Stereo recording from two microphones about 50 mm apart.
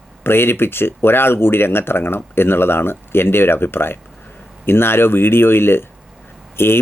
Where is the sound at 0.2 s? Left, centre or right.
Left.